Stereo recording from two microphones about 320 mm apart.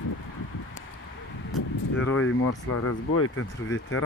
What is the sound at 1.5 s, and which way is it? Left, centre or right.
Speech, left.